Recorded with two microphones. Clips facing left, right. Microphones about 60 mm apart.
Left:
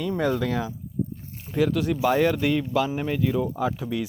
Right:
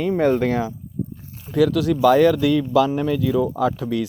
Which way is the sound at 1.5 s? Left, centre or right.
Right.